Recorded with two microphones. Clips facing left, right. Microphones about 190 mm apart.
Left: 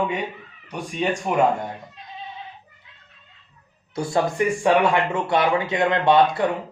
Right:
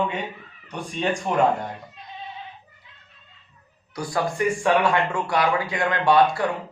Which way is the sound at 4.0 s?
25° left (ahead or behind).